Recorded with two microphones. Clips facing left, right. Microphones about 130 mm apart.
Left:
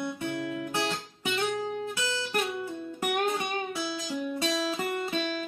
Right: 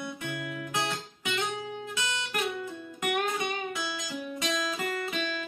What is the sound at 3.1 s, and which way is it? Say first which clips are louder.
Music: left 2 dB; 30° left (ahead or behind).